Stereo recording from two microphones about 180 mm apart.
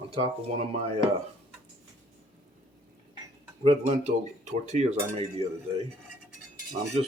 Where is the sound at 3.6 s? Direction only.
35° right (ahead or behind).